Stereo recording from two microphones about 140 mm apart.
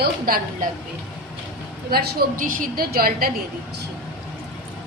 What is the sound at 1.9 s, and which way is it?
A woman's voice, 85° right.